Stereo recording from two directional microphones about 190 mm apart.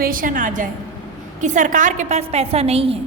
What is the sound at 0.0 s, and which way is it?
A woman's voice, 45° right (ahead or behind).